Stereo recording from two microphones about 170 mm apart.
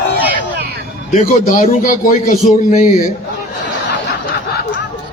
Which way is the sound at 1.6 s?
45° left (ahead or behind).